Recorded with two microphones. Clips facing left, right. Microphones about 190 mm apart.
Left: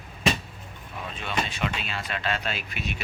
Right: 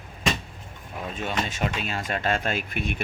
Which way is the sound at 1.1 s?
45° right (ahead or behind).